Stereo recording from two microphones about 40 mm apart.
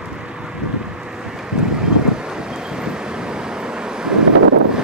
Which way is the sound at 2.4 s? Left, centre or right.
Centre.